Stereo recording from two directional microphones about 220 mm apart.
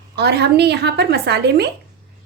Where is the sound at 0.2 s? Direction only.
50° right (ahead or behind).